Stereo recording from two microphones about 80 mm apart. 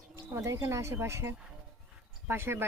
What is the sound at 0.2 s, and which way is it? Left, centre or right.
A woman's voice, right.